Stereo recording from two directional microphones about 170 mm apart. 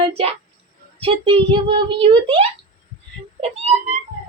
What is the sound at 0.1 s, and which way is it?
A child's voice, 35° right (ahead or behind).